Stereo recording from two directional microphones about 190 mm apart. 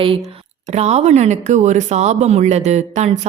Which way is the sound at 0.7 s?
35° right (ahead or behind).